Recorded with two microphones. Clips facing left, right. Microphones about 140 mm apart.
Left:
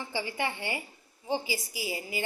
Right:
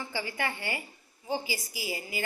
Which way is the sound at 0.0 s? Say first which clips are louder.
Left 1 dB; 25° left (ahead or behind).